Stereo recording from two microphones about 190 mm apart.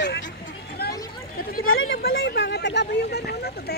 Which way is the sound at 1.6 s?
80° left.